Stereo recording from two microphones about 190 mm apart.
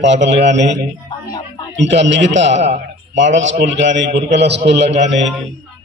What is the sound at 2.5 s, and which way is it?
Speech, 35° right (ahead or behind).